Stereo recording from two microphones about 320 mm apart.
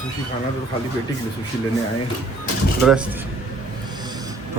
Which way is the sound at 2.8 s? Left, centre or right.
Centre.